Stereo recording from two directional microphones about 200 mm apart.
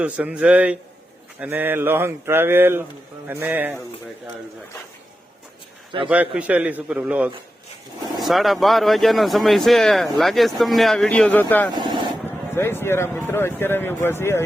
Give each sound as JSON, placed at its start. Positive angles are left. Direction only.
{"t": 0.0, "sound": "speech", "side_deg": -5}
{"t": 6.1, "sound": "speech", "side_deg": -5}
{"t": 11.7, "sound": "speech", "side_deg": -20}
{"t": 12.2, "sound": "speech", "side_deg": 10}